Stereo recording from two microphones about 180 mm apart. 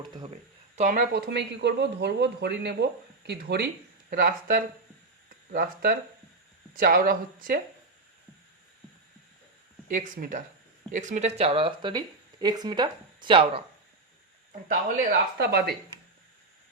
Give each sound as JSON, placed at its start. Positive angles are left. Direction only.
{"t": 0.8, "sound": "speech", "side_deg": -45}
{"t": 1.1, "sound": "speech", "side_deg": -70}
{"t": 4.1, "sound": "speech", "side_deg": -55}
{"t": 9.9, "sound": "speech", "side_deg": -50}
{"t": 14.7, "sound": "speech", "side_deg": -45}
{"t": 15.4, "sound": "speech", "side_deg": -65}